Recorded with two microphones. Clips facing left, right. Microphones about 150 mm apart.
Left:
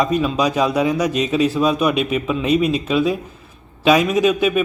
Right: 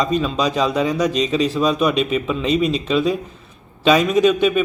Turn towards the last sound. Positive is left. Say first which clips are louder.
# right 1 dB
turn(degrees=5)  # may be behind; listen again after turning